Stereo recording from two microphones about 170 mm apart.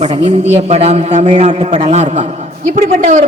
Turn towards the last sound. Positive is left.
turn(degrees=-50)  # may be behind; listen again after turning